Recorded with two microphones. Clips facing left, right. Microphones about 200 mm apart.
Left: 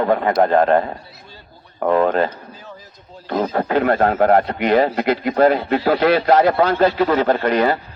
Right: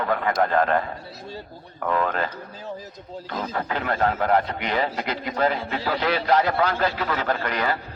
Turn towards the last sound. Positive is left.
turn(degrees=30)  # may be behind; listen again after turning